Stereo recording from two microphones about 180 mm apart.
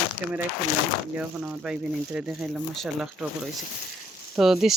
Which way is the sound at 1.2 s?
5° right (ahead or behind).